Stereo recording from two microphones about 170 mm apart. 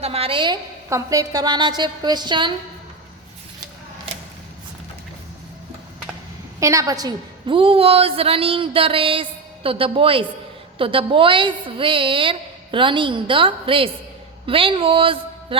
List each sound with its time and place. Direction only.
0.0 s a woman's voice: 35° right (ahead or behind)
6.6 s a woman's voice: 20° right (ahead or behind)